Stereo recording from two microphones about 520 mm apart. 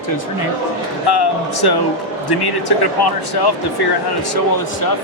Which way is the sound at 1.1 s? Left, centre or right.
Left.